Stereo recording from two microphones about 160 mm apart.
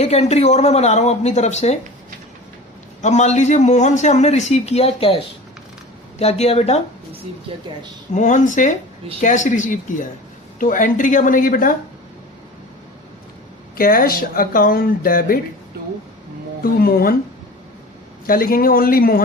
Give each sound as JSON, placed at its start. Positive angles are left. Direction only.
{"t": 0.0, "sound": "a man's voice", "side_deg": 40}
{"t": 3.0, "sound": "a man's voice", "side_deg": 45}
{"t": 7.5, "sound": "a woman's voice", "side_deg": -35}
{"t": 8.1, "sound": "a man's voice", "side_deg": 50}
{"t": 13.7, "sound": "speech", "side_deg": 65}
{"t": 16.8, "sound": "speech", "side_deg": 65}
{"t": 18.3, "sound": "speech", "side_deg": 60}